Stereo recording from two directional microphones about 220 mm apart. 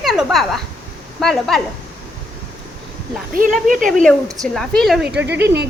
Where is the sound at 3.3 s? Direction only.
35° right (ahead or behind).